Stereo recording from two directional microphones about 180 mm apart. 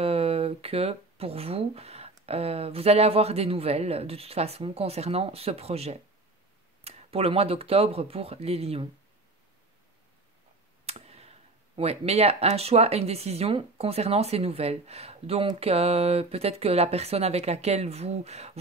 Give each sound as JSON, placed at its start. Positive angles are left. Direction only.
{"t": 0.0, "sound": "speech", "side_deg": -35}
{"t": 10.9, "sound": "speech", "side_deg": -35}